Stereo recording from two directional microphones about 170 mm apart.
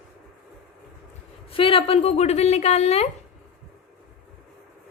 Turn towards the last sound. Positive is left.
turn(degrees=40)  # may be behind; listen again after turning